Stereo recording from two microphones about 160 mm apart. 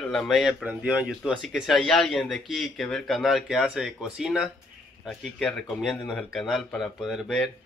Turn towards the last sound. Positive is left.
turn(degrees=0)  # may be behind; listen again after turning